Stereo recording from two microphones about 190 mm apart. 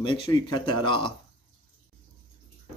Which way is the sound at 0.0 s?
25° left (ahead or behind).